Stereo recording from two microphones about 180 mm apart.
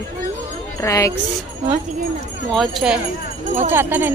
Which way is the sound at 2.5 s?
Centre (ahead or behind).